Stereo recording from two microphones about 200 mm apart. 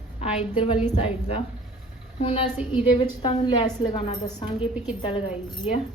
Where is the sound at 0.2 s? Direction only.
30° left (ahead or behind).